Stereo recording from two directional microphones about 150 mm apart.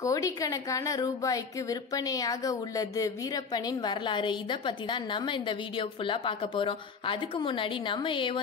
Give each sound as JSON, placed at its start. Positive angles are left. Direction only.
{"t": 0.0, "sound": "a woman's voice", "side_deg": 20}